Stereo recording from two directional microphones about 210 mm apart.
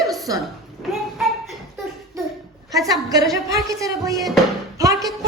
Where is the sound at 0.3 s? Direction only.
20° right (ahead or behind).